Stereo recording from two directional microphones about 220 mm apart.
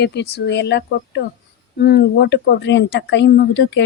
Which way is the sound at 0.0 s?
50° left (ahead or behind).